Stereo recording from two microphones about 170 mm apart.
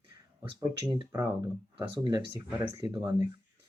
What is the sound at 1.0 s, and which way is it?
Speech, 20° right (ahead or behind).